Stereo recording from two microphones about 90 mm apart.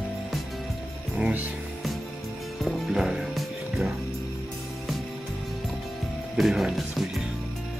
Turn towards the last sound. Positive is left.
turn(degrees=0)  # may be behind; listen again after turning